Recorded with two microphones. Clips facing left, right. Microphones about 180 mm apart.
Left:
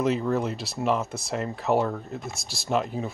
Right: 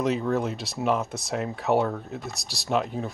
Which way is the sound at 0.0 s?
Centre (ahead or behind).